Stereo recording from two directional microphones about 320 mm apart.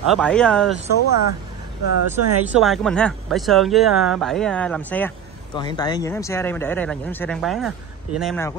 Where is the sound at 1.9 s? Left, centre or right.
Right.